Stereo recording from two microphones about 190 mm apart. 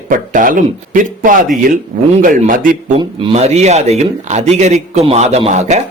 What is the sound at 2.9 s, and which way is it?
Speech, 30° right (ahead or behind).